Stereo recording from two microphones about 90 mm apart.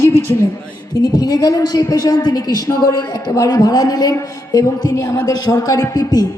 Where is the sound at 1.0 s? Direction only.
50° left (ahead or behind).